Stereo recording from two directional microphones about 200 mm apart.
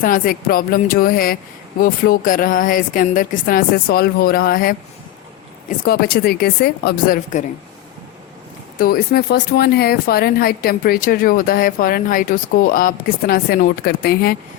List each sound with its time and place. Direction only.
0.0 s speech: 45° left (ahead or behind)
8.8 s speech: 50° left (ahead or behind)